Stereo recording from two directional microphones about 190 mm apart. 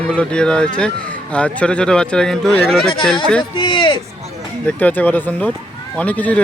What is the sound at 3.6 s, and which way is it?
Speech, 25° left (ahead or behind).